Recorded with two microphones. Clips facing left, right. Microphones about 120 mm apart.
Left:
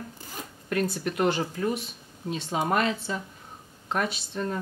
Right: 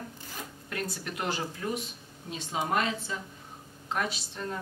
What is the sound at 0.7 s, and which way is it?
Speech, 55° left (ahead or behind).